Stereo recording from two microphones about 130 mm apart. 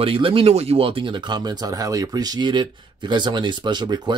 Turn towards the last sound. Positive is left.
turn(degrees=-35)  # may be behind; listen again after turning